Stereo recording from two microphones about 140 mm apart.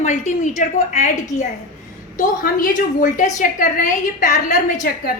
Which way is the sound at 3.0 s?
65° left (ahead or behind).